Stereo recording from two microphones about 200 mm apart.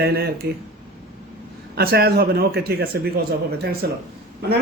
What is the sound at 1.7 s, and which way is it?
Speech, 50° right (ahead or behind).